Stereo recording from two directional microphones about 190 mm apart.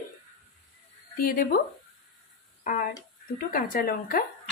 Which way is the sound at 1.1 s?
50° left (ahead or behind).